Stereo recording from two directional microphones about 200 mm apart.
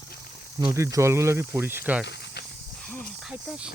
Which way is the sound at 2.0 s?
55° left (ahead or behind).